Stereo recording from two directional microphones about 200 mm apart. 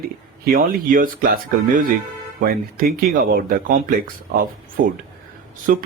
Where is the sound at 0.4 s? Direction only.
45° right (ahead or behind).